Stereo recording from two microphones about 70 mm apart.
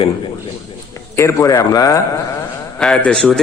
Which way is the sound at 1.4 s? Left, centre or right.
Left.